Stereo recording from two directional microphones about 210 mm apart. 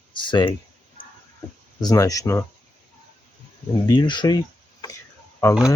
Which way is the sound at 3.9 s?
20° left (ahead or behind).